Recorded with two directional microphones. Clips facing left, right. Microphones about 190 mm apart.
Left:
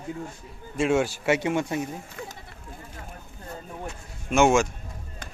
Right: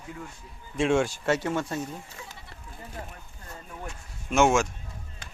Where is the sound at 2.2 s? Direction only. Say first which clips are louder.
Left 7 dB; 55° left (ahead or behind).